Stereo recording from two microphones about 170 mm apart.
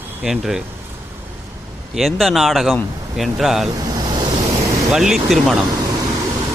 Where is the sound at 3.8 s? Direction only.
25° right (ahead or behind).